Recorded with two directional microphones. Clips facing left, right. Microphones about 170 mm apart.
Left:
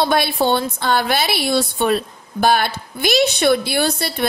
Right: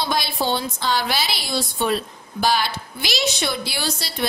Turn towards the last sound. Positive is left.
turn(degrees=55)  # may be behind; listen again after turning